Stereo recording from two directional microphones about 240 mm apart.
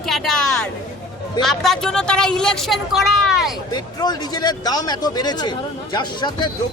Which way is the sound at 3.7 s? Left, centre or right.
Centre.